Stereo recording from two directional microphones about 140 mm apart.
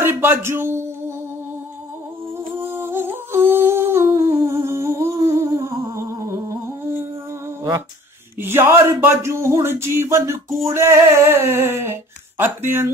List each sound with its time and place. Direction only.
0.0 s a man's voice: 15° right (ahead or behind)
2.5 s humming: 15° right (ahead or behind)
8.4 s speech: 15° right (ahead or behind)